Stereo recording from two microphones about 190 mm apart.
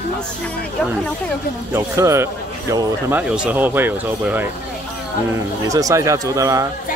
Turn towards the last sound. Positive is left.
turn(degrees=-15)  # may be behind; listen again after turning